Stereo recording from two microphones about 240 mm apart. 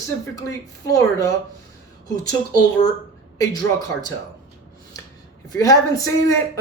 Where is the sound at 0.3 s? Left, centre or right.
Centre.